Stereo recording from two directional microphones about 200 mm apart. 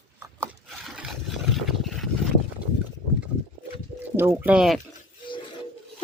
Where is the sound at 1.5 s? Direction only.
Centre (ahead or behind).